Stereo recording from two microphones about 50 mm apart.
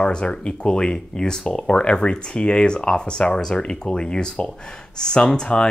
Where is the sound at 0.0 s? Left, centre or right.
Centre.